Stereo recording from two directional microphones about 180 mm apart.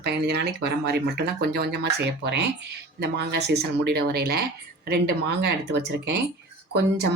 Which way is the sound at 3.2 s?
70° right (ahead or behind).